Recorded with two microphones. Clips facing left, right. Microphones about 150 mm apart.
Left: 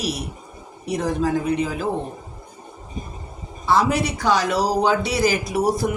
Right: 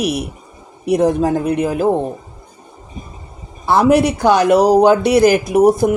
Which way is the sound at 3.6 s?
55° right (ahead or behind).